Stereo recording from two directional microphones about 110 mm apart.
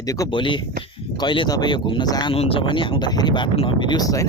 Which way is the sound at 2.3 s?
60° left (ahead or behind).